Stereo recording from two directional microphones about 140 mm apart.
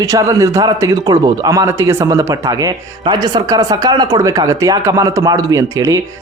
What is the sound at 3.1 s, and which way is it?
Speech, 30° right (ahead or behind).